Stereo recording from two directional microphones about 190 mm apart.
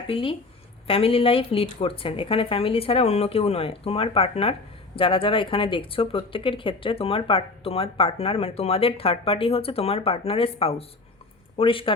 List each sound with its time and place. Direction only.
0.1 s speech: 30° left (ahead or behind)